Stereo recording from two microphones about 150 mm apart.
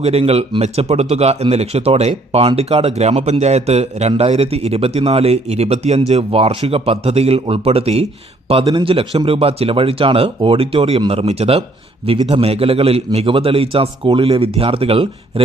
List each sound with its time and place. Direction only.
0.0 s speech: 45° right (ahead or behind)